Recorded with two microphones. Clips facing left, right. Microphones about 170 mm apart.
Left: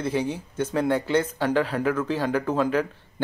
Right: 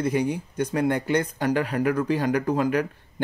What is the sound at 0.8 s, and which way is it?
Speech, 50° right (ahead or behind).